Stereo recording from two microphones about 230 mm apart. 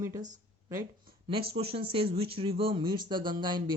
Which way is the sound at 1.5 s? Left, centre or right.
Right.